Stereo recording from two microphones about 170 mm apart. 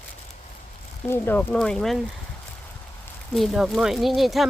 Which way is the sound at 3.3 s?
Centre (ahead or behind).